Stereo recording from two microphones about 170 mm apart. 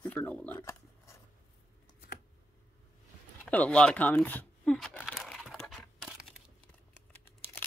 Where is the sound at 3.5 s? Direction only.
5° left (ahead or behind).